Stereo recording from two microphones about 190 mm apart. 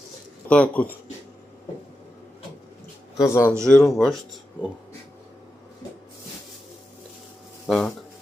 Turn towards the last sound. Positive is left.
turn(degrees=5)  # may be behind; listen again after turning